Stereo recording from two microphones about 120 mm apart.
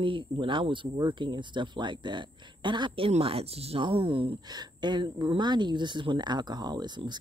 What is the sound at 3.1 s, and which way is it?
Speech, 55° right (ahead or behind).